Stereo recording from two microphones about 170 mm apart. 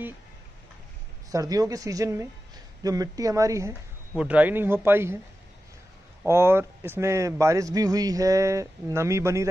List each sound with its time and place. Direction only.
1.3 s a man's voice: 20° right (ahead or behind)
6.2 s a man's voice: 15° right (ahead or behind)